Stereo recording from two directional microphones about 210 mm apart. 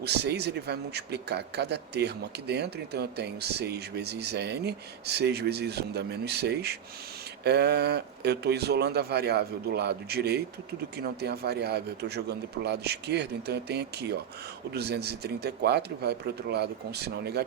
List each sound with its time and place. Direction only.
0.0 s a man's voice: 50° right (ahead or behind)